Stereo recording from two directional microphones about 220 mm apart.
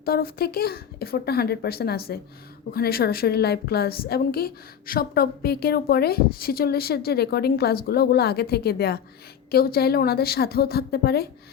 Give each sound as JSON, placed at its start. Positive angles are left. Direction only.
{"t": 0.0, "sound": "a woman's voice", "side_deg": 45}